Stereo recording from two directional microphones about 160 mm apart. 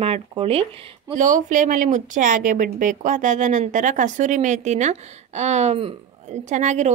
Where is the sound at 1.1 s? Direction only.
50° right (ahead or behind).